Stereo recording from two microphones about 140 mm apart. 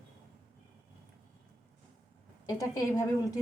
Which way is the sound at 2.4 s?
25° left (ahead or behind).